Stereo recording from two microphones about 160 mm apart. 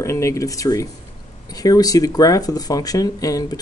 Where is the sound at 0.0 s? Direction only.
20° left (ahead or behind).